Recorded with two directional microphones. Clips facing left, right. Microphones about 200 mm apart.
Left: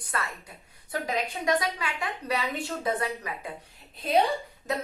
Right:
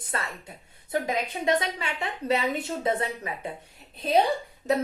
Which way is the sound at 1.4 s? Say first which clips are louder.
Right 2 dB; 25° right (ahead or behind).